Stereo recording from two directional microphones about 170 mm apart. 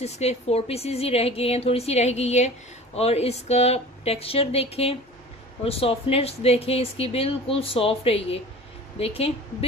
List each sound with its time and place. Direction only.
0.0 s speech: 40° left (ahead or behind)